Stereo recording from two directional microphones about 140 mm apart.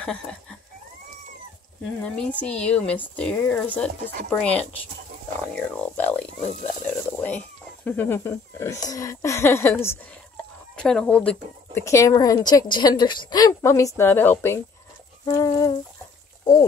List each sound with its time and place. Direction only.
0.0 s a sound: 5° left (ahead or behind)
2.4 s speech: 10° left (ahead or behind)
10.8 s speech: 5° left (ahead or behind)
11.8 s a woman's voice: 20° left (ahead or behind)